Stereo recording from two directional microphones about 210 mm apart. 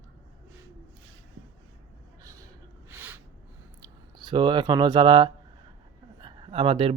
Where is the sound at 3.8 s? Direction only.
20° right (ahead or behind).